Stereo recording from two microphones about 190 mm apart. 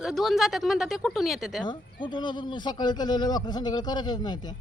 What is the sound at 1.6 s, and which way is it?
Speech, 25° left (ahead or behind).